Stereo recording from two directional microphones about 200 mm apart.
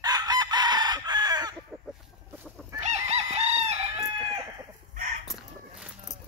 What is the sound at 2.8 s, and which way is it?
Chicken, 35° right (ahead or behind).